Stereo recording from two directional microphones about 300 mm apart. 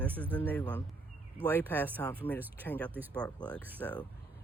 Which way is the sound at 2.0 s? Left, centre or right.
Centre.